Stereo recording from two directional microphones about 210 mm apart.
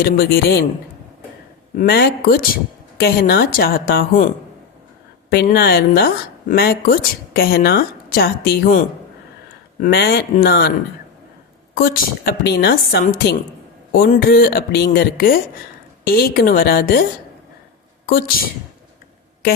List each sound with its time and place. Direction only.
0.0 s speech: 45° left (ahead or behind)
1.7 s speech: 45° left (ahead or behind)
5.3 s speech: 50° left (ahead or behind)
9.8 s speech: 50° left (ahead or behind)
11.7 s a woman's voice: 45° left (ahead or behind)